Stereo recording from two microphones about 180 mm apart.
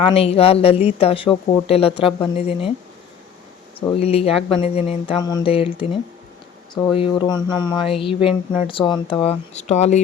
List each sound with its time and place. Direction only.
0.0 s speech: 30° left (ahead or behind)
3.9 s speech: 35° left (ahead or behind)
6.7 s speech: 25° left (ahead or behind)